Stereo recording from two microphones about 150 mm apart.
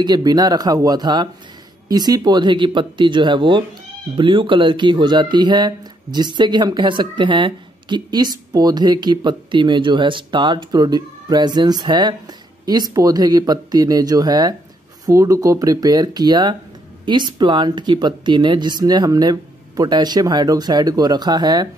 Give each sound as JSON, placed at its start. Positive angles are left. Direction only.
{"t": 0.0, "sound": "speech", "side_deg": -25}